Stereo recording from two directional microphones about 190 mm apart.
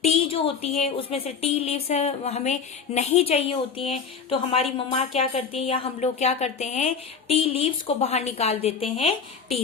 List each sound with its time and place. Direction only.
0.0 s speech: 30° left (ahead or behind)